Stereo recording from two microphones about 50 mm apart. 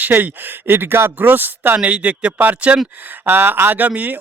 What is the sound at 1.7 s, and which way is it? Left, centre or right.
A man's voice, right.